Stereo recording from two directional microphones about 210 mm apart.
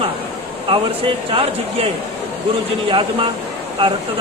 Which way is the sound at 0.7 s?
25° right (ahead or behind).